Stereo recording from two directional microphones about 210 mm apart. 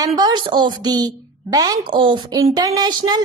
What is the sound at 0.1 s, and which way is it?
A woman's voice, 20° right (ahead or behind).